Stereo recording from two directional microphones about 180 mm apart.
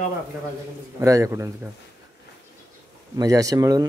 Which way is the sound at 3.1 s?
20° right (ahead or behind).